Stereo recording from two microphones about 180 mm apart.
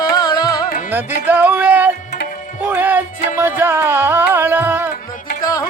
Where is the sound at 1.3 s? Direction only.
10° right (ahead or behind).